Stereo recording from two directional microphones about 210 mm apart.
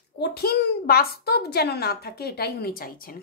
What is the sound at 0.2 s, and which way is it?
A child's voice, 50° left (ahead or behind).